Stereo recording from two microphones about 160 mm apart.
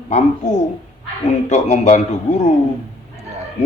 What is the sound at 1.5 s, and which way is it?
Speech, 45° left (ahead or behind).